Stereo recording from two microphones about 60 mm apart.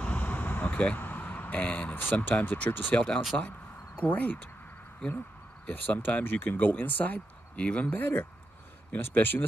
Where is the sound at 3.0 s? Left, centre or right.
Centre.